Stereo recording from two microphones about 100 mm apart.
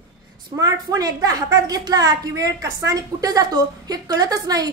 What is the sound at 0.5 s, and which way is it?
A woman's voice, 40° right (ahead or behind).